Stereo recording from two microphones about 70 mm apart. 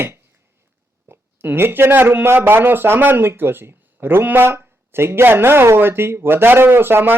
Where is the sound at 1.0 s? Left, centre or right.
Right.